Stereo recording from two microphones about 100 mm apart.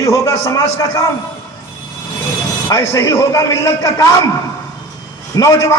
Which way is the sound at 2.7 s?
35° left (ahead or behind).